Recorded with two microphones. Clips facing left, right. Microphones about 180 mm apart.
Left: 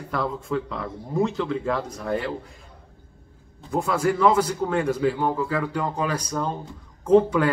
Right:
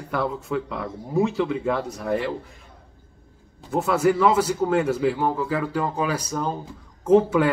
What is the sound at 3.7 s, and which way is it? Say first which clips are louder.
Speech: right 3 dB; 5° right (ahead or behind).